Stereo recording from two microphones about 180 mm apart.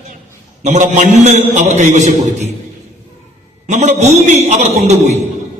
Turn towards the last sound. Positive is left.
turn(degrees=-40)  # may be behind; listen again after turning